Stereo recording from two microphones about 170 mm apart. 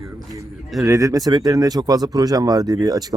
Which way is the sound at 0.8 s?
20° right (ahead or behind).